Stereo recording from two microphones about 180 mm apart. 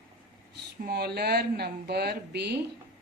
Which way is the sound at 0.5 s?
65° right (ahead or behind).